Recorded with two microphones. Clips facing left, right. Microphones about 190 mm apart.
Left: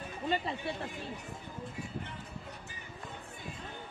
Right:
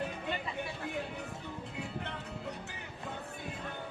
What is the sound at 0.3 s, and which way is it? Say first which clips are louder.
Speech: left 4 dB; 35° left (ahead or behind).